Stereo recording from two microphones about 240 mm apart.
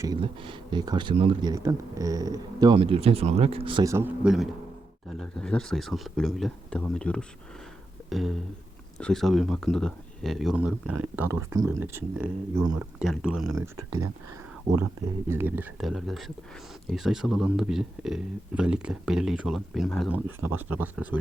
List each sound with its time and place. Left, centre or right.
0.0 s a man's voice: centre
15.3 s speech: centre